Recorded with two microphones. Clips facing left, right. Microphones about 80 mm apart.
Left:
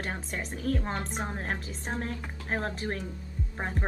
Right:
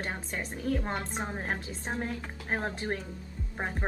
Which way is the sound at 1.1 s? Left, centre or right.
Centre.